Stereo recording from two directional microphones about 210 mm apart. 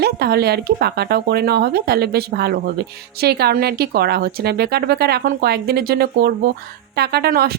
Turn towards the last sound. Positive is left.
turn(degrees=-50)  # may be behind; listen again after turning